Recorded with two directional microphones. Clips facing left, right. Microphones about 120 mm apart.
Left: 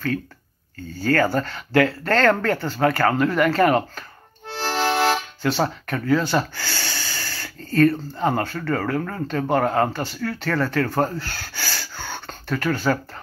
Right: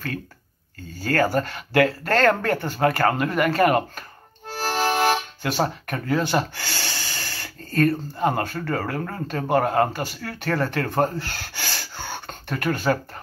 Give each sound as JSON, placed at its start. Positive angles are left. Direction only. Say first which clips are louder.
{"t": 0.9, "sound": "speech", "louder": "left 1 dB", "side_deg": -15}
{"t": 4.6, "sound": "music", "louder": "left 1 dB", "side_deg": -15}
{"t": 6.0, "sound": "speech", "louder": "left 2 dB", "side_deg": -20}